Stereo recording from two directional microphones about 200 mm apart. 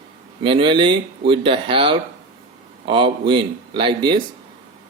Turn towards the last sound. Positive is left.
turn(degrees=-25)  # may be behind; listen again after turning